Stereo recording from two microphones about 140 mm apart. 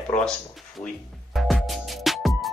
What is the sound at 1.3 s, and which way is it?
Music, centre (ahead or behind).